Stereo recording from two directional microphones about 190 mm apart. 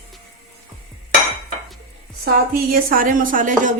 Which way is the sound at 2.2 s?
50° right (ahead or behind).